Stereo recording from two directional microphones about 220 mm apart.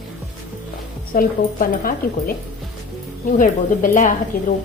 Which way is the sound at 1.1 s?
40° left (ahead or behind).